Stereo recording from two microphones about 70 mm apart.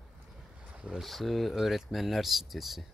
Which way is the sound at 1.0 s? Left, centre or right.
Centre.